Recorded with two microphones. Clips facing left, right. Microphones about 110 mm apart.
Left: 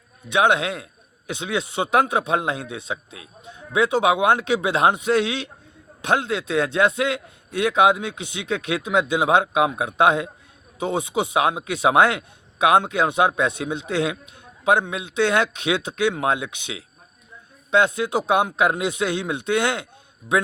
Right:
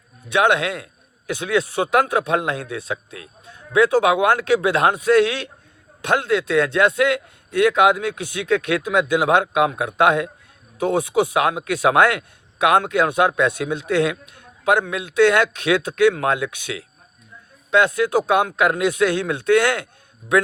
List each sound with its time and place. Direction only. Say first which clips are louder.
0.3 s speech: right 1 dB; 20° left (ahead or behind)